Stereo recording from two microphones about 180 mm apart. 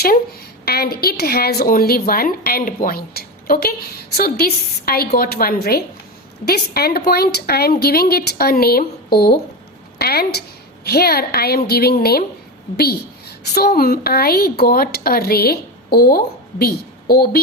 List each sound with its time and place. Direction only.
0.6 s a woman's voice: 60° left (ahead or behind)